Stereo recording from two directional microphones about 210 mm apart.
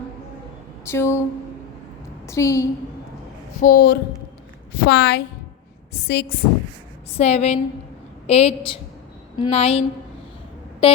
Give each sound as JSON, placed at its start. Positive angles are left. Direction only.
{"t": 0.9, "sound": "a sound", "side_deg": 15}
{"t": 2.2, "sound": "a woman's voice", "side_deg": 15}
{"t": 3.6, "sound": "a woman's voice", "side_deg": 45}
{"t": 7.2, "sound": "a woman's voice", "side_deg": 30}
{"t": 10.8, "sound": "a woman's voice", "side_deg": 25}